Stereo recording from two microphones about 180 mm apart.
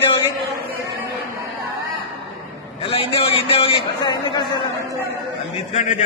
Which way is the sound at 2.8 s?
30° left (ahead or behind).